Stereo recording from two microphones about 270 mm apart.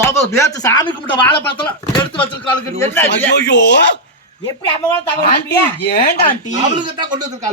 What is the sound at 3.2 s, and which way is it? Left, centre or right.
Speech, left.